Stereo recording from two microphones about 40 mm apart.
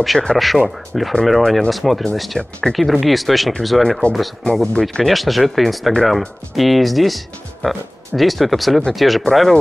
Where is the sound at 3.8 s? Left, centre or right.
Centre.